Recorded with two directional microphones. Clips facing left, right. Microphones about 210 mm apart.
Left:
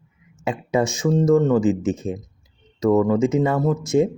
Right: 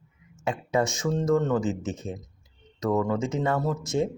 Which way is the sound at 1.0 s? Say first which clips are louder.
Left 7 dB; 10° left (ahead or behind).